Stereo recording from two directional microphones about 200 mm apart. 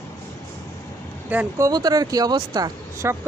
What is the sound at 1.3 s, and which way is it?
Speech, 10° right (ahead or behind).